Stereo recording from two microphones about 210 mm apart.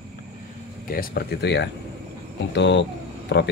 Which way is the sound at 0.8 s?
45° left (ahead or behind).